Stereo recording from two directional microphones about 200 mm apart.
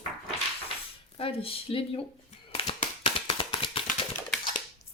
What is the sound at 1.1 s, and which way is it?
Speech, 25° left (ahead or behind).